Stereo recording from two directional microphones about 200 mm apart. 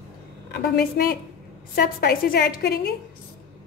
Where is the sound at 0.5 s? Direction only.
55° left (ahead or behind).